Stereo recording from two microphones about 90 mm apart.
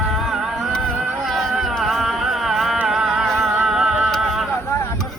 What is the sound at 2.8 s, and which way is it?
Music, 5° right (ahead or behind).